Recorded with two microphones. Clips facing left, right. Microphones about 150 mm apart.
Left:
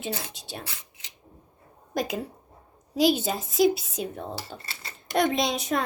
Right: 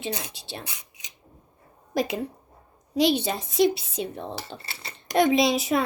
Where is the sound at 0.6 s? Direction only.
15° right (ahead or behind).